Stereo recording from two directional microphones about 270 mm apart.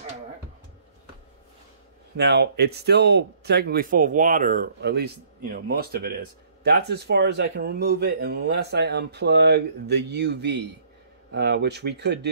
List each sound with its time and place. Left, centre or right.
2.1 s speech: right